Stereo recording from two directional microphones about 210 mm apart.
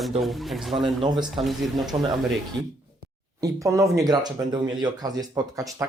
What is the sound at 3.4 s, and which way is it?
Speech, 15° right (ahead or behind).